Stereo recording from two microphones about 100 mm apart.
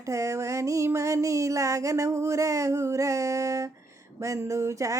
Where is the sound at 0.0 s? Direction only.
30° right (ahead or behind).